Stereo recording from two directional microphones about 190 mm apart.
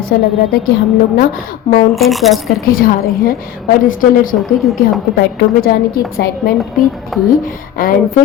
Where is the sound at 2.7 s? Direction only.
50° left (ahead or behind).